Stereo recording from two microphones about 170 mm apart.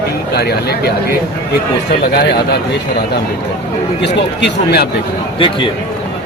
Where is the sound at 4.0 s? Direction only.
80° left.